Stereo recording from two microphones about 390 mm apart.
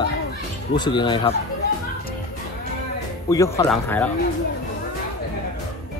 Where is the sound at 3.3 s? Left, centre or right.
Centre.